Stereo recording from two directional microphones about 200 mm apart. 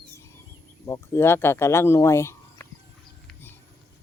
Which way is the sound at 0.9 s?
15° left (ahead or behind).